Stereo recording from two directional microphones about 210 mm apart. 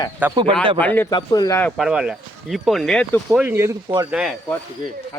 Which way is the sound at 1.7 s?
Centre (ahead or behind).